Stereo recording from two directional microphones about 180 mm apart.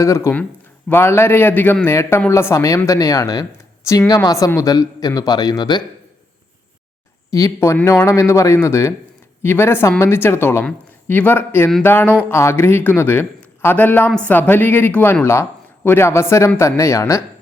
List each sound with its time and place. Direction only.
0.0 s speech: 15° left (ahead or behind)
7.3 s speech: 20° left (ahead or behind)